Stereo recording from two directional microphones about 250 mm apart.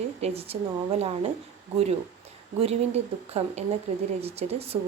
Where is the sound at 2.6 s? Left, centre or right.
Right.